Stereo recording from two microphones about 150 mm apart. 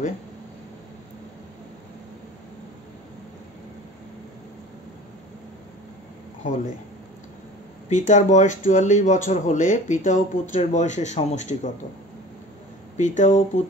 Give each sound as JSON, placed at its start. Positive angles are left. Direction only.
{"t": 7.9, "sound": "speech", "side_deg": 55}
{"t": 12.9, "sound": "speech", "side_deg": 55}